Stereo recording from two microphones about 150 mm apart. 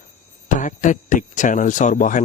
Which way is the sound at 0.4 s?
55° left (ahead or behind).